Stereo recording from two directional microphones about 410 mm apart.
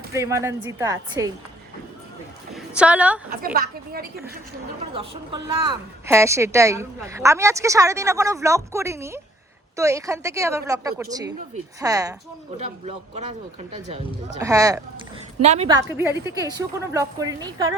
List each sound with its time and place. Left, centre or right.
0.1 s a woman's voice: centre
2.5 s a woman's voice: centre
3.4 s a woman's voice: right
4.9 s a woman's voice: centre